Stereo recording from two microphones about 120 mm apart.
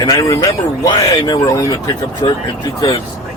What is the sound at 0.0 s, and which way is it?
Speech, 30° left (ahead or behind).